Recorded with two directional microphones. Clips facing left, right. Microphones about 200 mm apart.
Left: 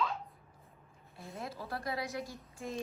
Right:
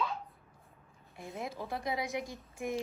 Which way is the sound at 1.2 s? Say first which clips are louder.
Right 3 dB; 20° right (ahead or behind).